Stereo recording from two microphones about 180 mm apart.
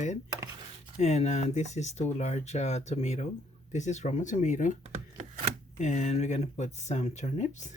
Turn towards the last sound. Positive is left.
turn(degrees=40)  # may be behind; listen again after turning